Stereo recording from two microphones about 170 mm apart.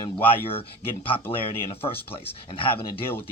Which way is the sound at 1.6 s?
35° left (ahead or behind).